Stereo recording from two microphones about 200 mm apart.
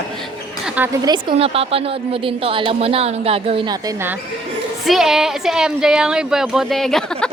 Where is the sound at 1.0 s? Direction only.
25° right (ahead or behind).